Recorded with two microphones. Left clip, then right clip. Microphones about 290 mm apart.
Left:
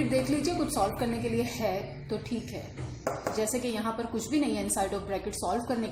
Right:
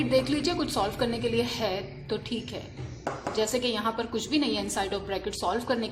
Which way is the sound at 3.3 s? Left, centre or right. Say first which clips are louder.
Right 3 dB; right.